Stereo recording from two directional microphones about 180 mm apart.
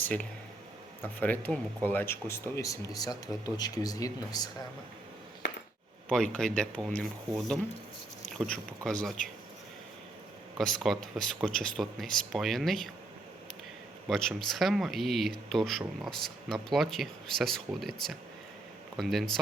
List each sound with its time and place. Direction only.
0.0 s speech: 10° left (ahead or behind)
5.4 s a sound: 90° left
6.1 s speech: 5° left (ahead or behind)
10.6 s speech: centre (ahead or behind)
14.1 s speech: centre (ahead or behind)